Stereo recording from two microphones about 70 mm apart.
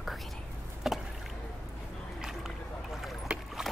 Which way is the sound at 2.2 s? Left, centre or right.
Centre.